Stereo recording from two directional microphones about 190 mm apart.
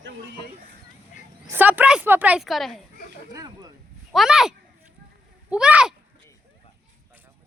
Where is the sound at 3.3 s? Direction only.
20° right (ahead or behind).